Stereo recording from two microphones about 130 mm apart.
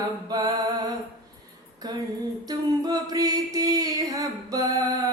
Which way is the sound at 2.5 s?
30° right (ahead or behind).